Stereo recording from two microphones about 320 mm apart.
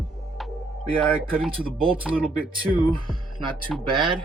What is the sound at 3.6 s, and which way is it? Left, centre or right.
Speech, centre.